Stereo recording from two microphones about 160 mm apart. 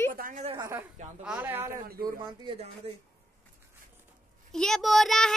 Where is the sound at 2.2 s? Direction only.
30° right (ahead or behind).